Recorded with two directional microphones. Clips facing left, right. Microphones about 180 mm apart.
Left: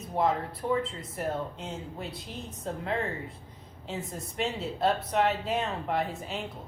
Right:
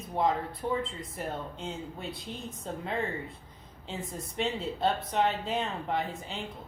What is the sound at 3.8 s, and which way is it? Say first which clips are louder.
A woman's voice: left 2 dB; centre (ahead or behind).